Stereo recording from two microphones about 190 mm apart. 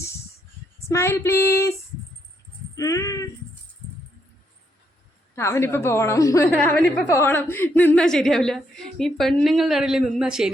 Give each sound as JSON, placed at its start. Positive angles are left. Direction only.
{"t": 0.9, "sound": "a woman's voice", "side_deg": 15}
{"t": 2.7, "sound": "a woman's voice", "side_deg": 15}
{"t": 5.3, "sound": "a woman's voice", "side_deg": 15}